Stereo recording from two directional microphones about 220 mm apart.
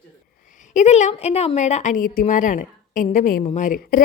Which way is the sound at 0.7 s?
30° left (ahead or behind).